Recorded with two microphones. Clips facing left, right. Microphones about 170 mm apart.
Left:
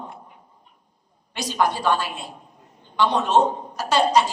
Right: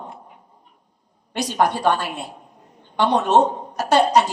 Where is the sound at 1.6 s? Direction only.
60° right (ahead or behind).